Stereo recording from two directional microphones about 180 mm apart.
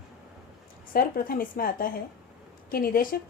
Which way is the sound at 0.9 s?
55° left (ahead or behind).